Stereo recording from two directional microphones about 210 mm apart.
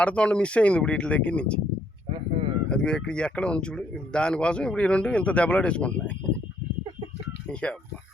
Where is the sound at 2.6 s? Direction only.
5° left (ahead or behind).